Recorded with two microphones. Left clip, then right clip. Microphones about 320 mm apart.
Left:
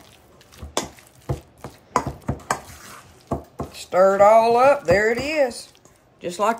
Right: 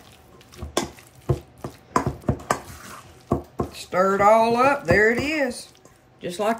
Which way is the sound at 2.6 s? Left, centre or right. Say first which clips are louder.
Right 1 dB; centre.